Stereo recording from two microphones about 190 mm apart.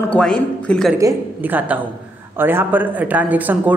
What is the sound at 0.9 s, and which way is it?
A woman's voice, 15° right (ahead or behind).